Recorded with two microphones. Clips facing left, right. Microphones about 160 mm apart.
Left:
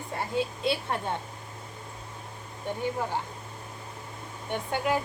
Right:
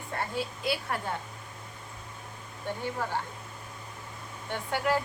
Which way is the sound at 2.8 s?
15° left (ahead or behind).